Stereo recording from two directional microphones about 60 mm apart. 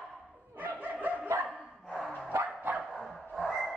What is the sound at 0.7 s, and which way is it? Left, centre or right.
Dog, right.